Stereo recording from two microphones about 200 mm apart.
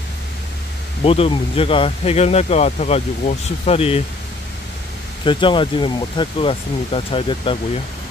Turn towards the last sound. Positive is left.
turn(degrees=25)  # may be behind; listen again after turning